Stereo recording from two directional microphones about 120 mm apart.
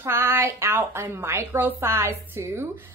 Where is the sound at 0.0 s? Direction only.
20° right (ahead or behind).